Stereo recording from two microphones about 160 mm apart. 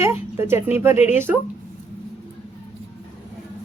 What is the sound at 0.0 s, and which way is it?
Speech, 15° right (ahead or behind).